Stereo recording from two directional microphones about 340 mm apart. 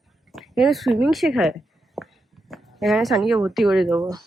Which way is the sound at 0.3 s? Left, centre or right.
Centre.